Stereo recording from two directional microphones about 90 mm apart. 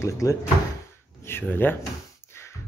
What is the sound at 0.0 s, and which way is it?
Speech, 40° left (ahead or behind).